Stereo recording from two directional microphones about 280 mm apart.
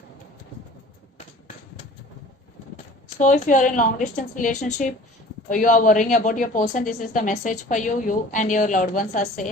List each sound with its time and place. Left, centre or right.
3.2 s a woman's voice: left